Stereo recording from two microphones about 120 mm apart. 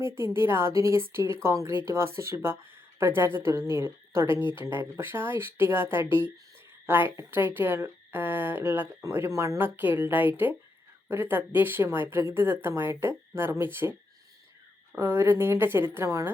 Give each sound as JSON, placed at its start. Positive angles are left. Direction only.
{"t": 0.3, "sound": "a woman's voice", "side_deg": -20}
{"t": 14.9, "sound": "a woman's voice", "side_deg": -20}